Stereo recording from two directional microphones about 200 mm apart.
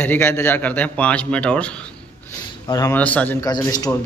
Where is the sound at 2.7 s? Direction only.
15° left (ahead or behind).